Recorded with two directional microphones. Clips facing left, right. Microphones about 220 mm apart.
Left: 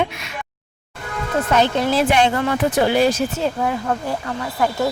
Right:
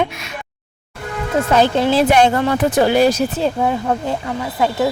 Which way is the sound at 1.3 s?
30° right (ahead or behind).